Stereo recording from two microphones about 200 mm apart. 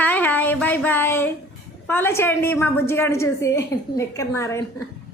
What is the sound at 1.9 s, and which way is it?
A woman's voice, 10° left (ahead or behind).